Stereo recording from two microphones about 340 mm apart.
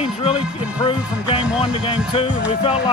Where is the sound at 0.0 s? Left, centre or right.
Centre.